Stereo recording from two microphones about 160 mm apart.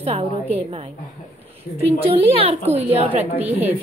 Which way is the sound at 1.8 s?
40° right (ahead or behind).